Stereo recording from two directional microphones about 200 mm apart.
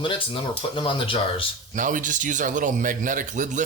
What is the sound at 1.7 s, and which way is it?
Speech, 40° right (ahead or behind).